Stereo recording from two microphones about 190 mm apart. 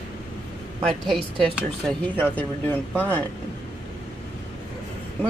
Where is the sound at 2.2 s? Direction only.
10° left (ahead or behind).